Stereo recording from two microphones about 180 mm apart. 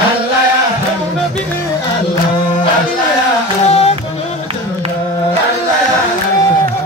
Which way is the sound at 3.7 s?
35° left (ahead or behind).